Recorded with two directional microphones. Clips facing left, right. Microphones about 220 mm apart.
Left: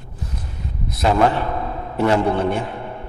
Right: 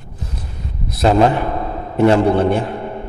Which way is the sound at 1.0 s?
25° right (ahead or behind).